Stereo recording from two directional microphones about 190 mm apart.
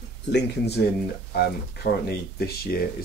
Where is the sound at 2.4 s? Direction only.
55° left (ahead or behind).